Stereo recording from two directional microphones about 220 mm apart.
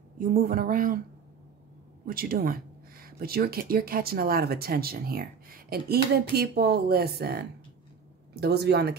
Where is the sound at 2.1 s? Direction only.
40° right (ahead or behind).